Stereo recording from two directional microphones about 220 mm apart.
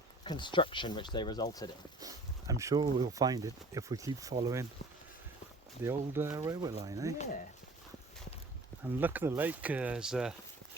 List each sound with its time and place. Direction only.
0.3 s speech: 20° left (ahead or behind)
2.0 s speech: 15° right (ahead or behind)
5.8 s speech: 10° right (ahead or behind)
9.0 s speech: 10° right (ahead or behind)